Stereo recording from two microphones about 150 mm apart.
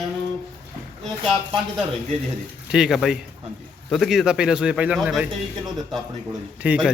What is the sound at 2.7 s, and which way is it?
A man's voice, 5° right (ahead or behind).